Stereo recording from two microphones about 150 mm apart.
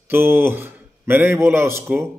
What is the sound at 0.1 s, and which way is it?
A man's voice, 15° right (ahead or behind).